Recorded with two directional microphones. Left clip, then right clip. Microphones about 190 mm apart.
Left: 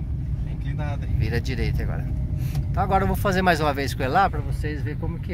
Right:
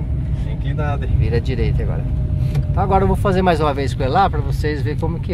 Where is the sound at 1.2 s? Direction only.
Centre (ahead or behind).